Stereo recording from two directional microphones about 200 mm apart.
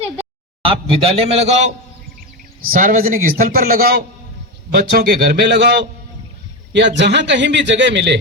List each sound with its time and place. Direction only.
0.6 s a man's voice: 30° right (ahead or behind); by 8.2 s 60° right (ahead or behind)